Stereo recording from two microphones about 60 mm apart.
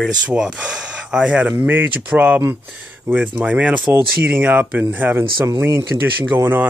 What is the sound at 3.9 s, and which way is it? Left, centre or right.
Speech, right.